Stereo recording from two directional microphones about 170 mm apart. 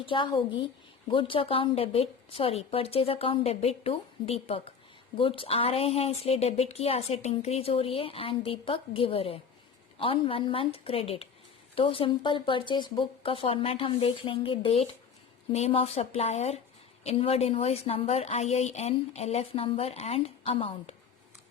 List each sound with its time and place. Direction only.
0.0 s a woman's voice: 30° left (ahead or behind)